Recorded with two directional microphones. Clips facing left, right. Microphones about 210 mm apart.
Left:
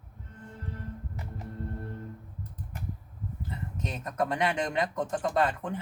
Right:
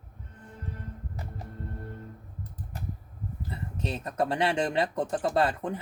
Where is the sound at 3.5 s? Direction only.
30° right (ahead or behind).